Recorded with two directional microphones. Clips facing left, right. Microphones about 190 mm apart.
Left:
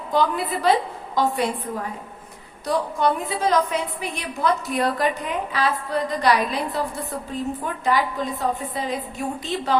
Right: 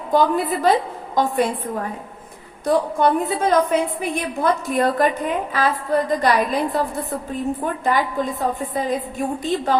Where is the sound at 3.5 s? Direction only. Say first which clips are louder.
Right 4 dB; 50° right (ahead or behind).